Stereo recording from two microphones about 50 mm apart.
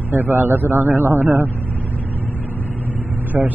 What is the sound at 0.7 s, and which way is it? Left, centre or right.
Speech, right.